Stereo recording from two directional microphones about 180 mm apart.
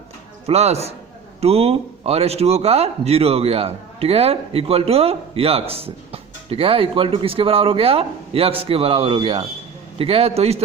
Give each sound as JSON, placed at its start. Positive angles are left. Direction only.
{"t": 0.4, "sound": "speech", "side_deg": -35}